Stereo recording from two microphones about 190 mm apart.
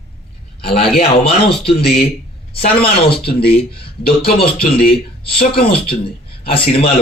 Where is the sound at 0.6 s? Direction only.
30° left (ahead or behind).